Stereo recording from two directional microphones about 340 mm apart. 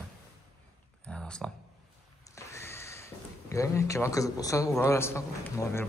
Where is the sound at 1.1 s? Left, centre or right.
Centre.